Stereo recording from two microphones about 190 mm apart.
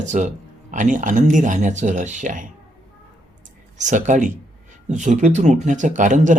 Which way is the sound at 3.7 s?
40° right (ahead or behind).